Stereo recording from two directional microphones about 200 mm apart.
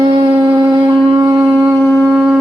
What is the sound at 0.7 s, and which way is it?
Shofar, 20° right (ahead or behind).